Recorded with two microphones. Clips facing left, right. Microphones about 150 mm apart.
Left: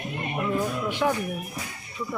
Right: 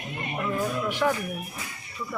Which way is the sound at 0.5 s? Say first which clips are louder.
Right 1 dB; 15° left (ahead or behind).